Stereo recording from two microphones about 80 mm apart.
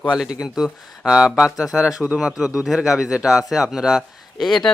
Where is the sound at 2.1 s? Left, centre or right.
Centre.